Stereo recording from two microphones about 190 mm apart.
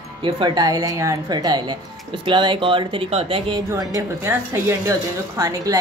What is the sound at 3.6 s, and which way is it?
A woman's voice, 15° right (ahead or behind).